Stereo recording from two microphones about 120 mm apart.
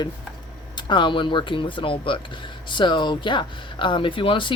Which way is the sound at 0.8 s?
40° left (ahead or behind).